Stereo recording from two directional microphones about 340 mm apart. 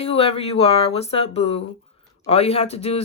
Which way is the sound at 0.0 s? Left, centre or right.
Centre.